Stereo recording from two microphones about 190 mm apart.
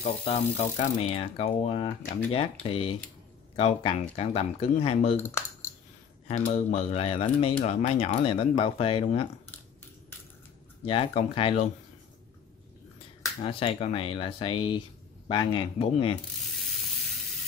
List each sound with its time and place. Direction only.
0.0 s speech: 40° left (ahead or behind)
5.2 s typing: 15° left (ahead or behind)
6.2 s speech: 35° left (ahead or behind)
10.9 s speech: 30° left (ahead or behind)
13.4 s speech: 30° left (ahead or behind)